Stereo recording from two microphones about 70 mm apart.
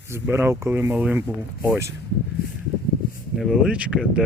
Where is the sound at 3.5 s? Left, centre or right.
Centre.